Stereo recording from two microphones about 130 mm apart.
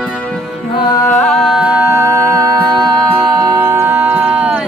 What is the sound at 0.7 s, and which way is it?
Music, 35° left (ahead or behind).